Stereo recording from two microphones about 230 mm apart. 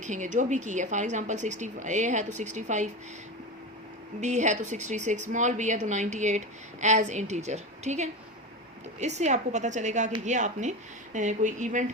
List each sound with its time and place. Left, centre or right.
0.0 s a woman's voice: right
4.2 s a woman's voice: right